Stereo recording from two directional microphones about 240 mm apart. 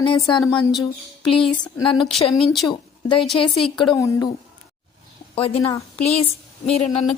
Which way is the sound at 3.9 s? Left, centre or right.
Centre.